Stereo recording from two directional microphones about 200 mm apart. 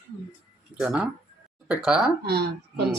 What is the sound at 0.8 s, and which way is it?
Speech, 5° right (ahead or behind).